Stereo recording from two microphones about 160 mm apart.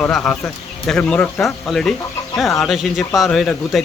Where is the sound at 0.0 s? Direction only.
5° left (ahead or behind).